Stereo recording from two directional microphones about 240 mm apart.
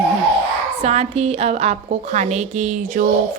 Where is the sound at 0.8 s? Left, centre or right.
Right.